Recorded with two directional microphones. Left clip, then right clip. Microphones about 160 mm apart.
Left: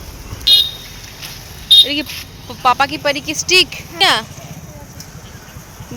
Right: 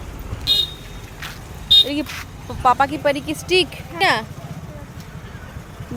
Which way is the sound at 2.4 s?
10° right (ahead or behind).